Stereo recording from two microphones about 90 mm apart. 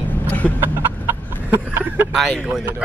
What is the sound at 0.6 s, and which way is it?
Chicken, 25° right (ahead or behind).